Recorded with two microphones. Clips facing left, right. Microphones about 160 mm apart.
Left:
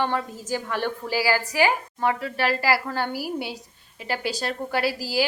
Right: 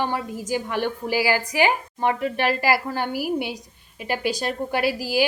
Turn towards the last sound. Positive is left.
turn(degrees=-15)  # may be behind; listen again after turning